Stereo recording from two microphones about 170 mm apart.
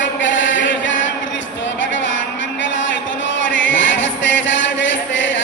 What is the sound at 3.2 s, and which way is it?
Chant, 90° left.